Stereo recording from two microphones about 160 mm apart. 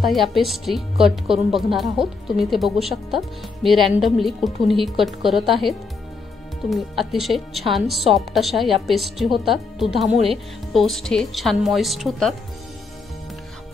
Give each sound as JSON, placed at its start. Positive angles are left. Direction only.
{"t": 0.0, "sound": "speech", "side_deg": 0}
{"t": 10.1, "sound": "speech", "side_deg": -35}
{"t": 10.7, "sound": "speech", "side_deg": 0}